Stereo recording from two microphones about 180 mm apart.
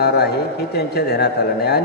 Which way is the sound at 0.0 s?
65° left (ahead or behind).